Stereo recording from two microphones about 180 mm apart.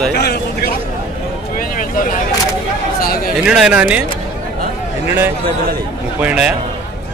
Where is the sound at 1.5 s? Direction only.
50° left (ahead or behind).